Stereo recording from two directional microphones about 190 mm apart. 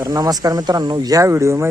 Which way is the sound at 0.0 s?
20° right (ahead or behind).